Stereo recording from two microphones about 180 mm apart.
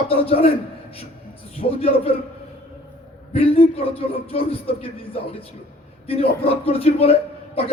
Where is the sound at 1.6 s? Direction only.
40° left (ahead or behind).